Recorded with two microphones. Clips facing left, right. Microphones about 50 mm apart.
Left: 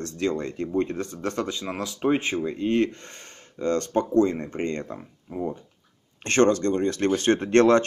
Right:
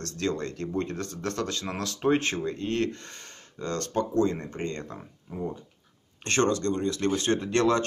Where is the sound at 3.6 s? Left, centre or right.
Left.